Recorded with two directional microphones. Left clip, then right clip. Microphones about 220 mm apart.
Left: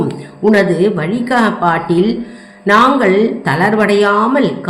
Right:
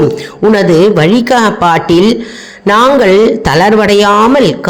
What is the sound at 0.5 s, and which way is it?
A man's voice, 40° right (ahead or behind).